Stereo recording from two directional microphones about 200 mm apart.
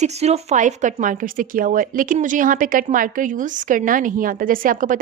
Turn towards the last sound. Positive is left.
turn(degrees=-40)  # may be behind; listen again after turning